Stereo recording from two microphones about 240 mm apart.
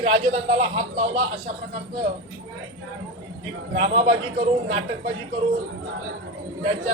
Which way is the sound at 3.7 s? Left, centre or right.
Right.